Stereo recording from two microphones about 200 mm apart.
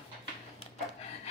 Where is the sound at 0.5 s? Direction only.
30° left (ahead or behind).